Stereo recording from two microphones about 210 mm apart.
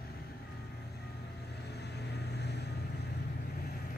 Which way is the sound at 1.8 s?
55° left (ahead or behind).